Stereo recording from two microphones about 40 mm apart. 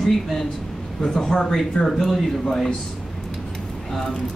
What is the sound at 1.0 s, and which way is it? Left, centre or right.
Speech, centre.